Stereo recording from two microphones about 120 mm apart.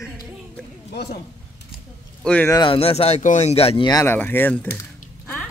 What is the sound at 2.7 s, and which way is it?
Speech, 55° left (ahead or behind).